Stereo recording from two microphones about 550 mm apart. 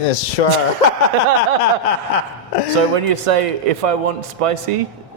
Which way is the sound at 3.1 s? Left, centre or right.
Right.